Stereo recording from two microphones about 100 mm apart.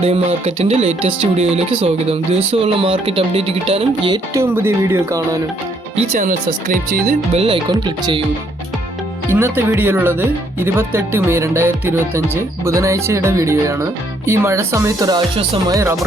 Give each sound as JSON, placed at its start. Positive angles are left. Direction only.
{"t": 0.0, "sound": "speech", "side_deg": -90}
{"t": 4.4, "sound": "speech", "side_deg": -25}
{"t": 7.3, "sound": "speech", "side_deg": -65}
{"t": 7.7, "sound": "music", "side_deg": -50}
{"t": 9.3, "sound": "speech", "side_deg": -25}